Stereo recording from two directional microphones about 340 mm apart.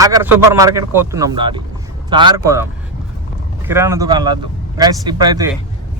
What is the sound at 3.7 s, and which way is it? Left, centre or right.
A man's voice, centre.